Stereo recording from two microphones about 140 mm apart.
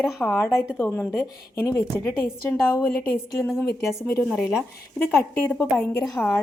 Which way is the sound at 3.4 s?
Centre (ahead or behind).